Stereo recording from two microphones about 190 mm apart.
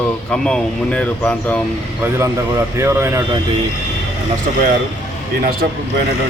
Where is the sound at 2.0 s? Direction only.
15° right (ahead or behind).